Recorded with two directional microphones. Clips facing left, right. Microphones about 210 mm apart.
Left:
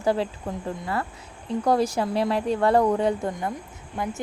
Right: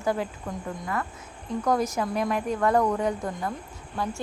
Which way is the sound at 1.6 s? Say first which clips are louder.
Left 3 dB; 30° left (ahead or behind).